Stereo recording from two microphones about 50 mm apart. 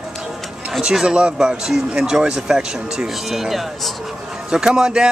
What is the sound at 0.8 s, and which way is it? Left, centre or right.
Speech, centre.